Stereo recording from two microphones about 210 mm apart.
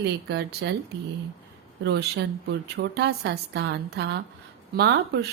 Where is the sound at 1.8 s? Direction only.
50° right (ahead or behind).